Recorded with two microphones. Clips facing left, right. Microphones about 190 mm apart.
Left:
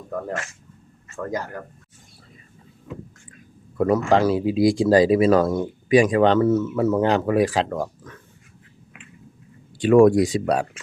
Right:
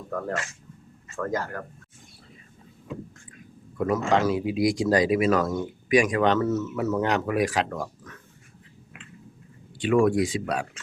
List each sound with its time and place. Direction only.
1.1 s speech: 15° left (ahead or behind)
3.8 s a man's voice: 35° left (ahead or behind)
9.7 s speech: 40° left (ahead or behind)